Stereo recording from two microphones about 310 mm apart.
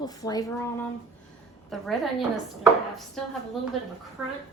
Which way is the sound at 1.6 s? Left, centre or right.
Centre.